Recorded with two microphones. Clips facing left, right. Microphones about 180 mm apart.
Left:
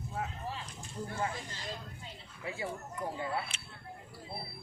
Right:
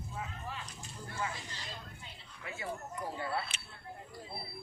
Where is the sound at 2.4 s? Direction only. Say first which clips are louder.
Left 5 dB; 30° left (ahead or behind).